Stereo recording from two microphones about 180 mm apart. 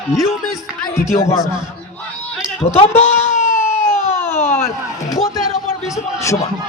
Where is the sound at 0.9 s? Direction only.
15° left (ahead or behind).